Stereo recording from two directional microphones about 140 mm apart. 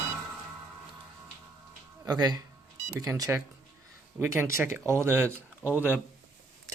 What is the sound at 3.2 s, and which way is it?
Speech, 20° right (ahead or behind).